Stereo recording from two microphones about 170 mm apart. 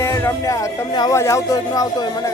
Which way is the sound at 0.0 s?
15° left (ahead or behind).